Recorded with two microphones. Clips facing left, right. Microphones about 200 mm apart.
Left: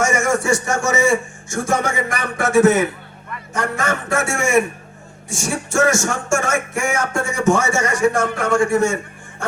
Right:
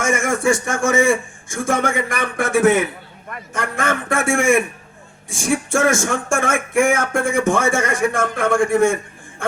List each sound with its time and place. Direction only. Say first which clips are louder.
0.0 s speech: even; 55° right (ahead or behind)